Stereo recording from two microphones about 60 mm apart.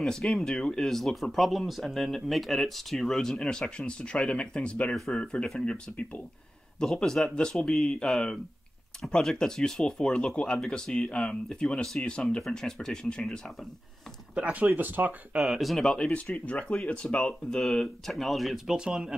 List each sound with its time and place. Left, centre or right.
0.0 s speech: centre
6.8 s speech: centre
14.4 s speech: right
15.4 s speech: centre
16.0 s speech: left
17.2 s speech: centre